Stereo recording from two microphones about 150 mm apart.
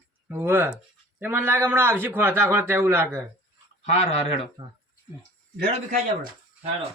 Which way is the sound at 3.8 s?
45° left (ahead or behind).